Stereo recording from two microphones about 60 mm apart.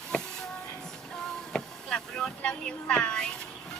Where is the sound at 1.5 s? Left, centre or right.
Centre.